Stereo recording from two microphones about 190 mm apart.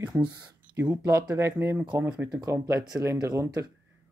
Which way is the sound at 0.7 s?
15° right (ahead or behind).